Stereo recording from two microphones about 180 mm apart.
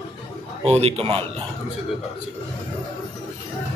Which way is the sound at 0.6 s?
35° right (ahead or behind).